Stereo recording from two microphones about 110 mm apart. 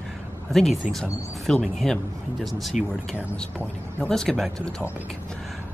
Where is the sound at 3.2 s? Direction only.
10° left (ahead or behind).